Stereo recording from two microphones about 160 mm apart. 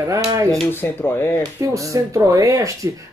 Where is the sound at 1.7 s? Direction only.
20° right (ahead or behind).